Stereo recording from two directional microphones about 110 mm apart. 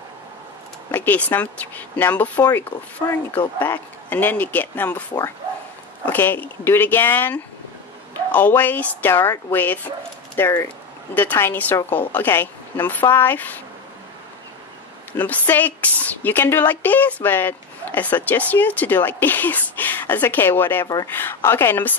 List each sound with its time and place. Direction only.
0.9 s speech: 15° left (ahead or behind)
6.0 s speech: 20° left (ahead or behind)
15.1 s speech: 15° left (ahead or behind)
20.8 s speech: 35° left (ahead or behind)
21.1 s speech: 20° left (ahead or behind)